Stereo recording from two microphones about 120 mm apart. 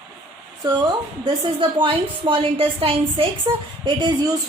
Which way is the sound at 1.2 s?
45° right (ahead or behind).